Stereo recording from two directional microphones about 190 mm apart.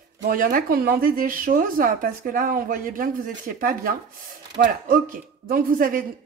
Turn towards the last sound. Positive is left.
turn(degrees=-45)  # may be behind; listen again after turning